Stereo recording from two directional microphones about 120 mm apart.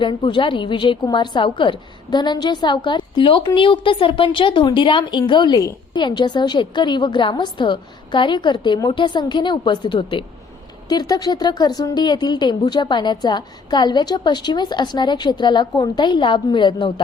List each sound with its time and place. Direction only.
0.0 s speech: 40° left (ahead or behind)